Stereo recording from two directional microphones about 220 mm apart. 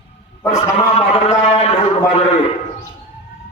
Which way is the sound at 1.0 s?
25° left (ahead or behind).